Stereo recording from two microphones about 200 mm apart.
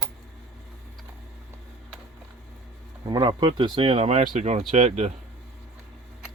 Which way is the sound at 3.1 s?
25° right (ahead or behind).